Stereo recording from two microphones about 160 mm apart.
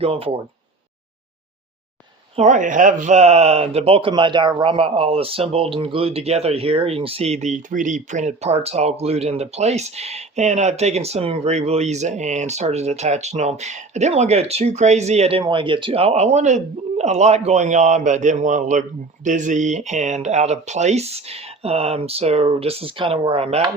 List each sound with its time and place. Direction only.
0.0 s speech: 35° right (ahead or behind)
2.3 s speech: 50° right (ahead or behind)